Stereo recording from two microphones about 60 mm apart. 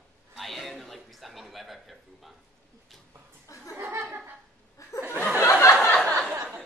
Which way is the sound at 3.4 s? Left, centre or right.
Left.